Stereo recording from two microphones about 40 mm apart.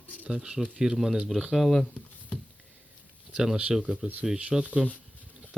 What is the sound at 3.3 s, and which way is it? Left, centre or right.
Speech, centre.